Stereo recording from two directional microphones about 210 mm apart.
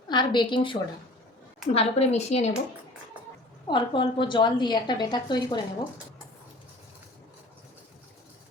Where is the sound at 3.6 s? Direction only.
20° left (ahead or behind).